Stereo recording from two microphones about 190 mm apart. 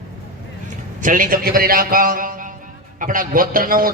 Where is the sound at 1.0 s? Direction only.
45° right (ahead or behind).